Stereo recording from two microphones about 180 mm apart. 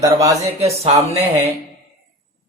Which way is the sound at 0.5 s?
35° right (ahead or behind).